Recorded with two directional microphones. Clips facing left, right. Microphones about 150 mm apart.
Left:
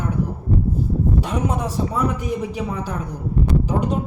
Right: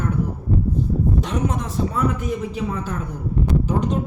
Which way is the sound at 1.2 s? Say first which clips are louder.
Left 1 dB; 10° left (ahead or behind).